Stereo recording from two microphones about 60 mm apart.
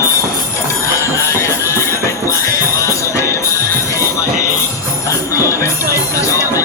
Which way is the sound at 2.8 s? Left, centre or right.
Left.